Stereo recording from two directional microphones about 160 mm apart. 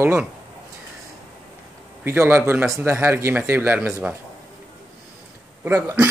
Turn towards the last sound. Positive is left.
turn(degrees=-15)  # may be behind; listen again after turning